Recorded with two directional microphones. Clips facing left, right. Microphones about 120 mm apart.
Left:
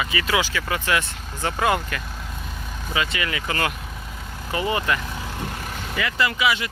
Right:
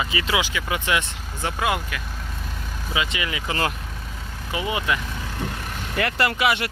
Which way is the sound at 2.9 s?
15° right (ahead or behind).